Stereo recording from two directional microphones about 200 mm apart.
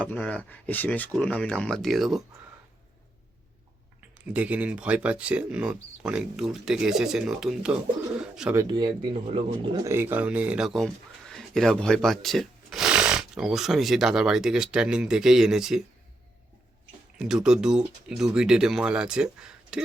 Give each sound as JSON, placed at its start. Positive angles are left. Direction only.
{"t": 0.0, "sound": "speech", "side_deg": 10}
{"t": 4.1, "sound": "speech", "side_deg": -5}
{"t": 8.5, "sound": "speech", "side_deg": -20}
{"t": 17.2, "sound": "speech", "side_deg": -5}